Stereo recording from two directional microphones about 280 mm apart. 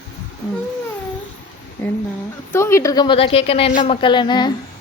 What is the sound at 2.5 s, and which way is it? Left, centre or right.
A woman's voice, centre.